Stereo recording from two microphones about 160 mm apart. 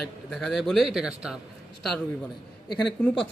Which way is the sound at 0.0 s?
5° left (ahead or behind).